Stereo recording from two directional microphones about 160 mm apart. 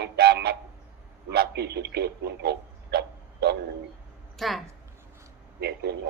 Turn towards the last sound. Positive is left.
turn(degrees=-90)